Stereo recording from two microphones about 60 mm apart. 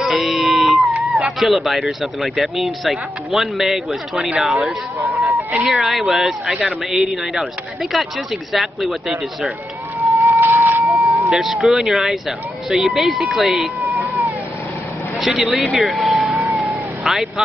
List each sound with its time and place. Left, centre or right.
0.0 s a sound: centre
1.4 s speech: centre
5.2 s a sound: right
5.7 s speech: centre
8.5 s speech: centre
10.2 s a sound: right
11.2 s speech: centre
15.1 s speech: centre
16.3 s cat: centre
17.0 s speech: centre